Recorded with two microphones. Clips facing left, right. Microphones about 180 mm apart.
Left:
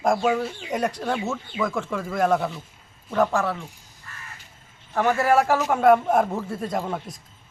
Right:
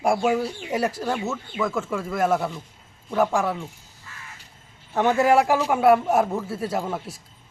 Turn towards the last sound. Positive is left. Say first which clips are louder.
# even
turn(degrees=-5)  # may be behind; listen again after turning